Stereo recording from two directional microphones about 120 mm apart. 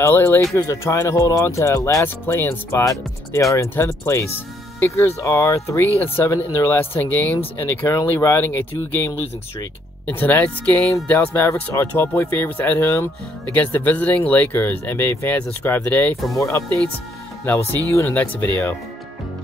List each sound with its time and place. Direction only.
0.0 s speech: 20° left (ahead or behind)